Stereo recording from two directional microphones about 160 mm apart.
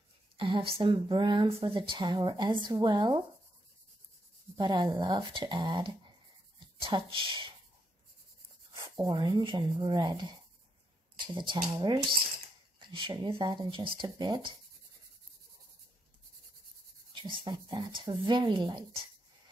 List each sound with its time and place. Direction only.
0.4 s speech: 35° right (ahead or behind)
4.6 s speech: 30° right (ahead or behind)
8.7 s speech: 25° right (ahead or behind)
17.1 s speech: 30° right (ahead or behind)